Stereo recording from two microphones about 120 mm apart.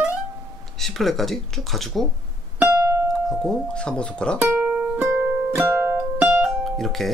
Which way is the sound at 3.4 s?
5° left (ahead or behind).